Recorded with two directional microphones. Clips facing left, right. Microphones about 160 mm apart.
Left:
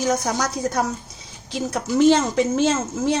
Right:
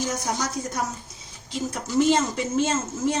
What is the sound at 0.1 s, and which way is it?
A child's voice, 80° left.